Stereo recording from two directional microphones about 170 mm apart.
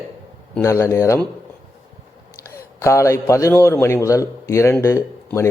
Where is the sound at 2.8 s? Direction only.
15° left (ahead or behind).